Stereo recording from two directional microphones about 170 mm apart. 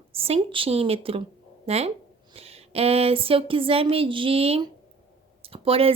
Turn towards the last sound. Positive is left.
turn(degrees=-35)  # may be behind; listen again after turning